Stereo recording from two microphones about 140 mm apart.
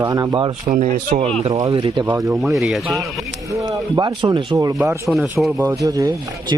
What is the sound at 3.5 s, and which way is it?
Speech, 25° right (ahead or behind).